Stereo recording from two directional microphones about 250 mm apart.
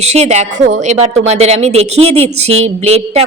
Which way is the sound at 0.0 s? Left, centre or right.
Right.